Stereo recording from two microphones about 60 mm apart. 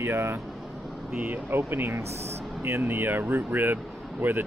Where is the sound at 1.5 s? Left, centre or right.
Right.